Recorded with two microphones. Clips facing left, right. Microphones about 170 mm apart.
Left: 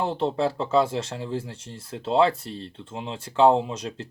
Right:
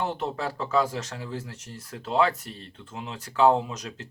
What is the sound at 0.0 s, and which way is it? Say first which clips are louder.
Speech: left 5 dB; 30° left (ahead or behind).